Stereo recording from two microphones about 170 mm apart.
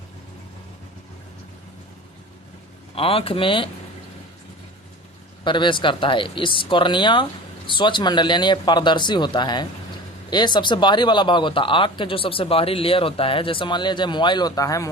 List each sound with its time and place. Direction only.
2.9 s speech: 35° left (ahead or behind)
5.4 s speech: 30° left (ahead or behind)